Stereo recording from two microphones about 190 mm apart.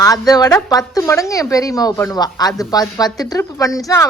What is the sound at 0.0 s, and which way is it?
A woman's voice, 20° left (ahead or behind).